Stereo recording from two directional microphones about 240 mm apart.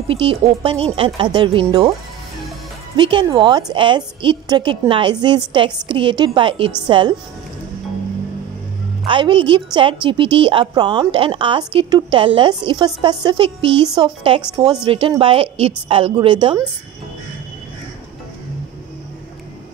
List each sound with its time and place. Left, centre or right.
0.1 s a woman's voice: right
3.0 s a woman's voice: centre
9.0 s a woman's voice: right